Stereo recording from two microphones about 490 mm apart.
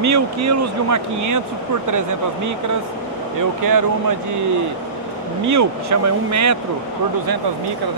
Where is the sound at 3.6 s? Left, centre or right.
Right.